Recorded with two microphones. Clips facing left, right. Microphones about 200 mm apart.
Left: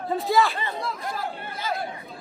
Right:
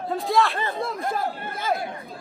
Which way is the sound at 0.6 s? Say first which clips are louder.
Right 3 dB; 50° right (ahead or behind).